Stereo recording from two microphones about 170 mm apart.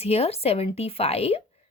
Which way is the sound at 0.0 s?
35° left (ahead or behind).